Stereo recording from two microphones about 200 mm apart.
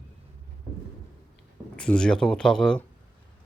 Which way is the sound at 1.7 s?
5° left (ahead or behind).